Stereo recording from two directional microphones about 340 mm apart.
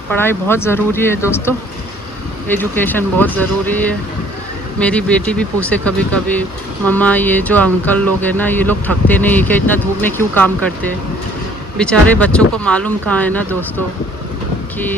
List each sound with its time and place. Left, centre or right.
0.1 s speech: centre
11.8 s speech: centre